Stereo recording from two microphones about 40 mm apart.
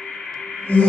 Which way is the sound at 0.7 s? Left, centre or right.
Left.